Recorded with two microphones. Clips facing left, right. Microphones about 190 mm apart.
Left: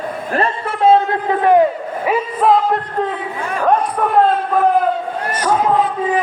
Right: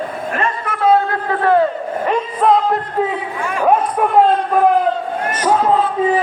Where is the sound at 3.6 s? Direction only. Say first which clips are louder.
Right 1 dB; 10° right (ahead or behind).